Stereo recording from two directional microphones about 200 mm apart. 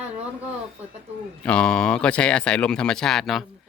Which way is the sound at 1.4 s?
5° left (ahead or behind).